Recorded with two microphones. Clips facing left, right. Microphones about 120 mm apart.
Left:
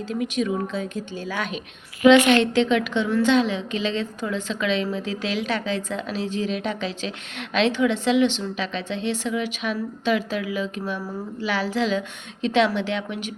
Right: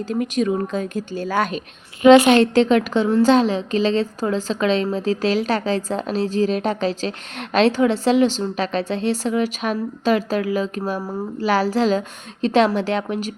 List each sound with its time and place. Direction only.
0.1 s a woman's voice: 45° right (ahead or behind)